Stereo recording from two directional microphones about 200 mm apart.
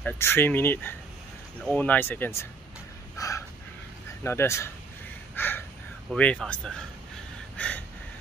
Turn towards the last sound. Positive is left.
turn(degrees=5)  # may be behind; listen again after turning